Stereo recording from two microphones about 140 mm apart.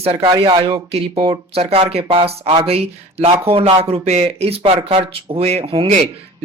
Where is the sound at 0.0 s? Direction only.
45° right (ahead or behind).